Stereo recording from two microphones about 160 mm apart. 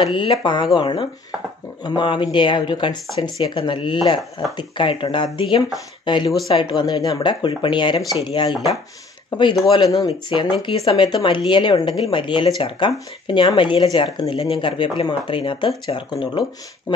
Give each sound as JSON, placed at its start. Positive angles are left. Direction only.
{"t": 0.0, "sound": "speech", "side_deg": 30}
{"t": 9.9, "sound": "speech", "side_deg": 35}